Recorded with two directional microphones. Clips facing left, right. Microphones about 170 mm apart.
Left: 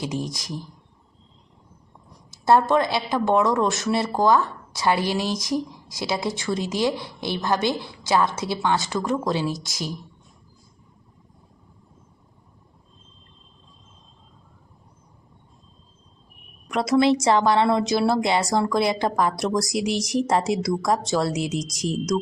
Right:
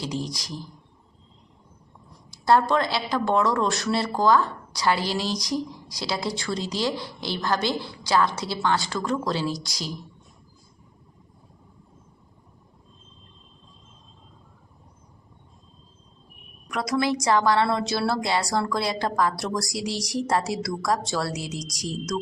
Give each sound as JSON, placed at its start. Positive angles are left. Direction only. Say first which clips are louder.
{"t": 0.0, "sound": "a woman's voice", "louder": "left 2 dB", "side_deg": 20}
{"t": 2.3, "sound": "a woman's voice", "louder": "left 2 dB", "side_deg": 25}
{"t": 16.6, "sound": "a woman's voice", "louder": "left 6 dB", "side_deg": 25}